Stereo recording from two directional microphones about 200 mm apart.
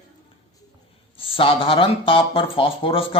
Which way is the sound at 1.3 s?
25° left (ahead or behind).